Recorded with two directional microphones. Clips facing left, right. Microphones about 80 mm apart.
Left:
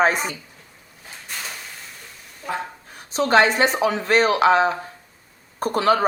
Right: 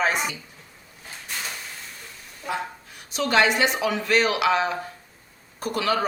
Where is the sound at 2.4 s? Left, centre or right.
Left.